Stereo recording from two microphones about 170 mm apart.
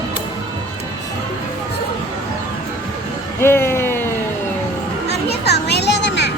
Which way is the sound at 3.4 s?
15° left (ahead or behind).